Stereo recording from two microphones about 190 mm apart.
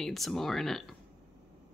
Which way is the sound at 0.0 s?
Centre (ahead or behind).